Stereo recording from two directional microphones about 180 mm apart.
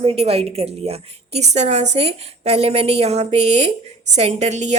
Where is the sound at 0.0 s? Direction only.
35° right (ahead or behind).